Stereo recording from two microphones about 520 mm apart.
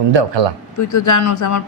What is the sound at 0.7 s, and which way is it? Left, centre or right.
Speech, left.